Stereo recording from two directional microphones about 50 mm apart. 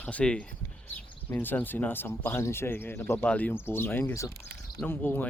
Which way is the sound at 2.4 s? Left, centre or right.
Left.